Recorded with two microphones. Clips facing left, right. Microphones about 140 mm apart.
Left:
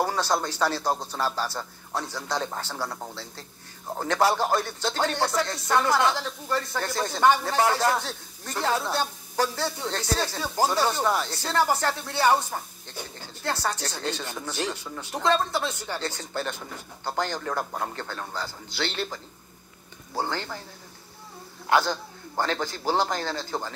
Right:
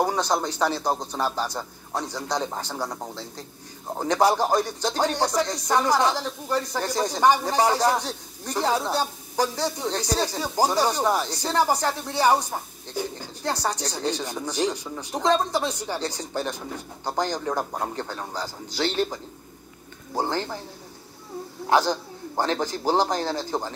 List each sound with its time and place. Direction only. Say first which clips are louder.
0.0 s speech: right 2 dB; 15° right (ahead or behind)
21.8 s a sound: right 4 dB; 15° right (ahead or behind)
22.5 s a man's voice: right 4 dB; 35° right (ahead or behind)